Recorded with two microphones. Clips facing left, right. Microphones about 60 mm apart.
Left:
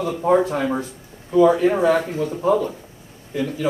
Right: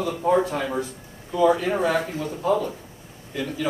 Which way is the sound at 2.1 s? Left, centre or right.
Left.